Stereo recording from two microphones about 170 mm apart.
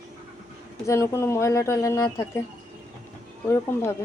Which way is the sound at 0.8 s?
15° left (ahead or behind).